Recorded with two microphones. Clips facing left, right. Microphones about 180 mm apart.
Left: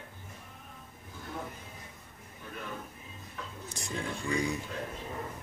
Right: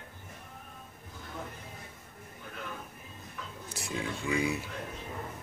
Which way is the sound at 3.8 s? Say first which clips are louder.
Right 1 dB; 5° right (ahead or behind).